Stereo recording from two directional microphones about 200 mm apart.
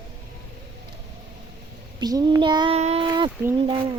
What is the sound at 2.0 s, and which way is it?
Child singing, 20° right (ahead or behind).